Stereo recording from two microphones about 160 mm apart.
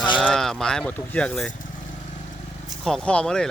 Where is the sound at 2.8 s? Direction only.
5° left (ahead or behind).